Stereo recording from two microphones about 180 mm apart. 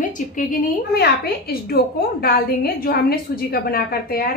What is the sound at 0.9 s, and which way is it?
A woman's voice, 60° left (ahead or behind).